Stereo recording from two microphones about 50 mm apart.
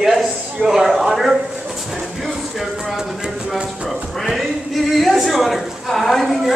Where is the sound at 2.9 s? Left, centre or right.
Centre.